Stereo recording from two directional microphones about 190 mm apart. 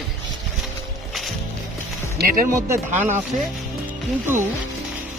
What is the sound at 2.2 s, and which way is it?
Speech, 55° right (ahead or behind).